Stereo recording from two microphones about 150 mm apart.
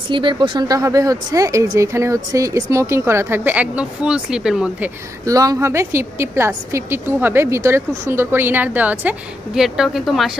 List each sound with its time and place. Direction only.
0.1 s speech: 30° right (ahead or behind); by 4.9 s 5° right (ahead or behind)
5.2 s a woman's voice: 25° right (ahead or behind); by 10.3 s centre (ahead or behind)